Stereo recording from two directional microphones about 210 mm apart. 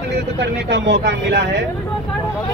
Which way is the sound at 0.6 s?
55° right (ahead or behind).